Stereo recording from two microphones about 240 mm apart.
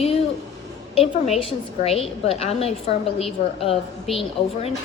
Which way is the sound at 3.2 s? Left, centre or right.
Centre.